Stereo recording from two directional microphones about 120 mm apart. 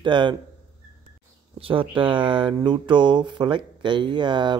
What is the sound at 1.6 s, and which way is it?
Speech, 50° right (ahead or behind).